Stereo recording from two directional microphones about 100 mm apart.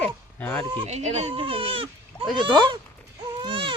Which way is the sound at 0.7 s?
75° right (ahead or behind).